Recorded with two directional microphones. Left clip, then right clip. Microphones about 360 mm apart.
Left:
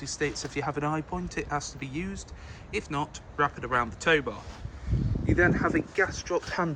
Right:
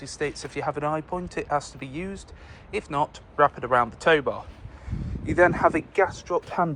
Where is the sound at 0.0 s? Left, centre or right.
Centre.